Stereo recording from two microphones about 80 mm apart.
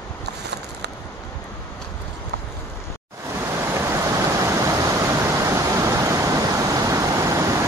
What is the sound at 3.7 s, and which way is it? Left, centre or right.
Vehicle, right.